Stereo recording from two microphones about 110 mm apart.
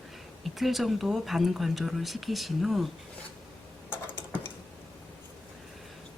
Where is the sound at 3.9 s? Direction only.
20° left (ahead or behind).